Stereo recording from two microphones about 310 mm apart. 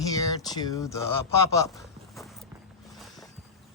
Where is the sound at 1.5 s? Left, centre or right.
Centre.